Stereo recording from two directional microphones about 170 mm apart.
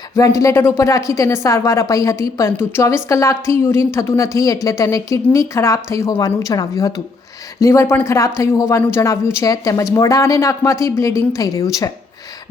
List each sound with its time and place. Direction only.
0.2 s a woman's voice: 20° left (ahead or behind)